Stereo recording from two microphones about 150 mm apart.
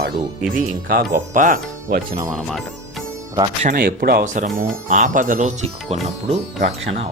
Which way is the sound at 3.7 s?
90° right.